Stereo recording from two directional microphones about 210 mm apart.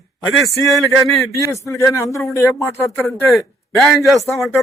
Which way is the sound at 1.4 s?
15° left (ahead or behind).